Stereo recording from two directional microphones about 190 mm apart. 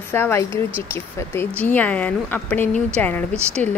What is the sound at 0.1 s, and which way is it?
Speech, 15° left (ahead or behind).